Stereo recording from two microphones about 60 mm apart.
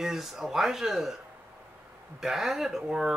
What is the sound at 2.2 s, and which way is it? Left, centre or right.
Speech, centre.